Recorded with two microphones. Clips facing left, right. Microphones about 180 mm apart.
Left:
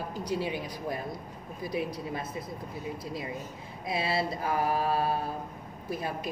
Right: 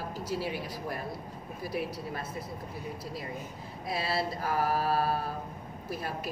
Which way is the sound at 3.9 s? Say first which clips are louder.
Left 2 dB; 25° left (ahead or behind).